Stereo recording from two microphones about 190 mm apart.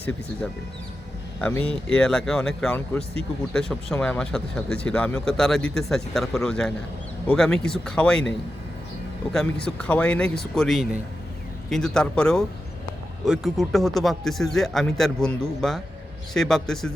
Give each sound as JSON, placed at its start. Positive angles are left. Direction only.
{"t": 1.4, "sound": "speech", "side_deg": 10}